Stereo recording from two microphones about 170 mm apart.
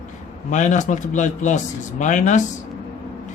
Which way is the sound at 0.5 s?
45° left (ahead or behind).